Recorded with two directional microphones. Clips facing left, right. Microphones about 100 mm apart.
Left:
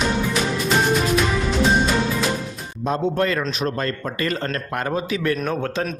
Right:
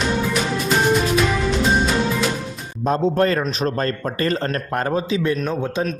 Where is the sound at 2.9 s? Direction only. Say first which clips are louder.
Right 3 dB; 35° right (ahead or behind).